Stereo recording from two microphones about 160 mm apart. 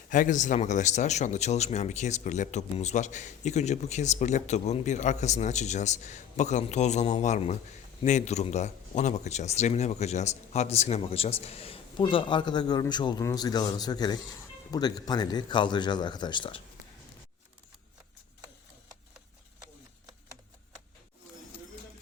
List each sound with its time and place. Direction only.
0.1 s a man's voice: 55° left (ahead or behind); by 16.6 s 30° left (ahead or behind)